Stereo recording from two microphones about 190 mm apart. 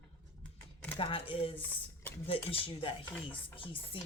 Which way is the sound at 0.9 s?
30° left (ahead or behind).